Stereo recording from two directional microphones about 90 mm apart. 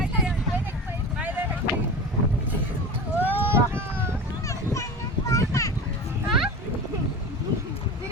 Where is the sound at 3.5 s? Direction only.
25° right (ahead or behind).